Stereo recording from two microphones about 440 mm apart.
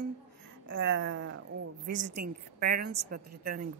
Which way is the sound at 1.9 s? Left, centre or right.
Centre.